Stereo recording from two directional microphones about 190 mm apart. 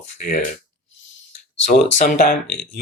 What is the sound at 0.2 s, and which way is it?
Speech, 45° left (ahead or behind).